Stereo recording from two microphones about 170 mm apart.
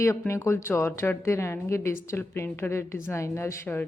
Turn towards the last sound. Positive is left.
turn(degrees=15)  # may be behind; listen again after turning